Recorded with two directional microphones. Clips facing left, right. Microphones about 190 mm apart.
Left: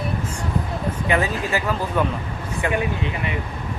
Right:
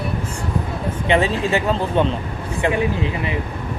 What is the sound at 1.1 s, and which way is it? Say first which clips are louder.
Speech: right 5 dB; 25° right (ahead or behind).